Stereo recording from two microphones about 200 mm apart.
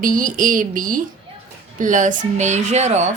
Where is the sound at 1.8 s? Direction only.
40° right (ahead or behind).